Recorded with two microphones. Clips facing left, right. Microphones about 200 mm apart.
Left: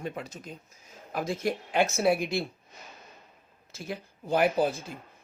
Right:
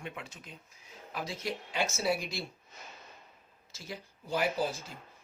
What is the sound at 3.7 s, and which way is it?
Speech, 55° left (ahead or behind).